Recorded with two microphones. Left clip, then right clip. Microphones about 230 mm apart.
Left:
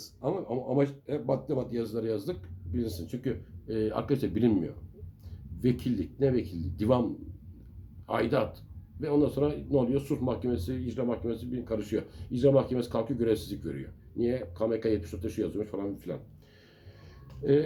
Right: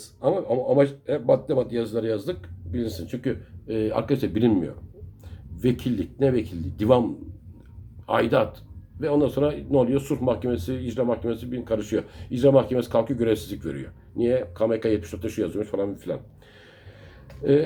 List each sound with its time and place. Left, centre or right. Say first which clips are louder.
0.0 s speech: right 9 dB; centre
8.0 s speech: right 7 dB; centre
17.4 s speech: right 5 dB; centre